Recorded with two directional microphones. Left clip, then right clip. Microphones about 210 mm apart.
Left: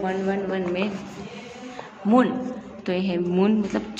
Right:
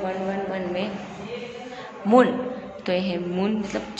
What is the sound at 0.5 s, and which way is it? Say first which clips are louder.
Speech: left 2 dB; 30° left (ahead or behind).